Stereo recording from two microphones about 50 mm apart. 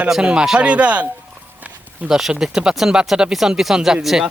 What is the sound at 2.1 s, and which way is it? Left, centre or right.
Speech, centre.